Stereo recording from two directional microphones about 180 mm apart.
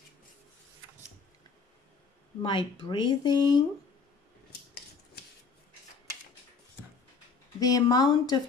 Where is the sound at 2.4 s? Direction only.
25° left (ahead or behind).